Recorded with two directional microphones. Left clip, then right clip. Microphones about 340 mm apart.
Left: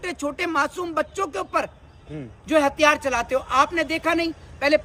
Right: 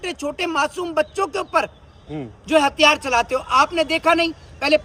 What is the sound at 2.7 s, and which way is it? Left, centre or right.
Speech, centre.